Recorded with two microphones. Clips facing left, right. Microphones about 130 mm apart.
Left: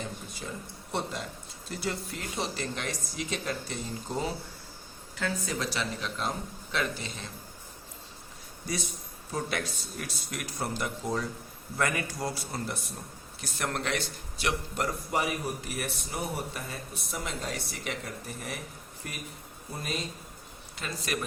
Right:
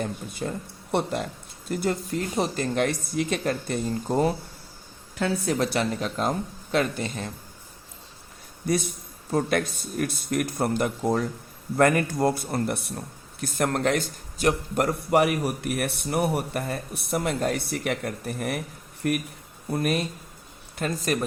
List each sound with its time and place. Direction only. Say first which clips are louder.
0.0 s a man's voice: right 8 dB; 55° right (ahead or behind)
8.6 s a man's voice: right 9 dB; 55° right (ahead or behind)
13.4 s a man's voice: right 9 dB; 50° right (ahead or behind)
20.7 s speech: right 8 dB; 45° right (ahead or behind)